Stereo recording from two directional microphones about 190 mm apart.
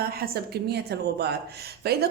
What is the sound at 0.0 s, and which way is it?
A woman's voice, 55° right (ahead or behind).